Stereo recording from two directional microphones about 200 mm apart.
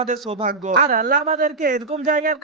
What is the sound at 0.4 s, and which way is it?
Speech, 40° right (ahead or behind).